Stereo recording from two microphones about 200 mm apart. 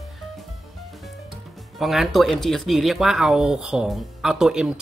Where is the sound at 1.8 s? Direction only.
Centre (ahead or behind).